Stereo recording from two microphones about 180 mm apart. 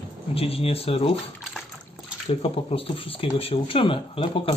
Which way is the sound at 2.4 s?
30° left (ahead or behind).